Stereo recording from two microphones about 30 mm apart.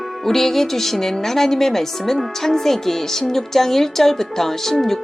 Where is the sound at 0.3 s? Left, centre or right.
Centre.